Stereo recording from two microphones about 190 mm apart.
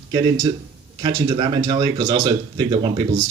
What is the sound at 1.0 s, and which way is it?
Speech, 25° right (ahead or behind).